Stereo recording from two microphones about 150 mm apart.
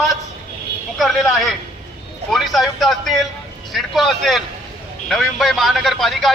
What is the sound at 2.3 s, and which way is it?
Speech, centre (ahead or behind).